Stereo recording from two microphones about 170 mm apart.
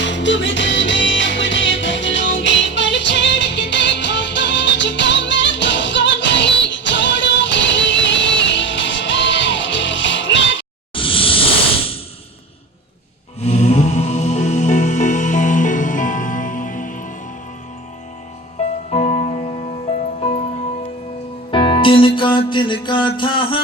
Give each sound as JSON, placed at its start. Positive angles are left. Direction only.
{"t": 0.0, "sound": "music", "side_deg": 90}
{"t": 10.9, "sound": "a sound", "side_deg": 30}
{"t": 13.4, "sound": "music", "side_deg": 40}
{"t": 18.9, "sound": "music", "side_deg": 35}
{"t": 21.5, "sound": "music", "side_deg": 30}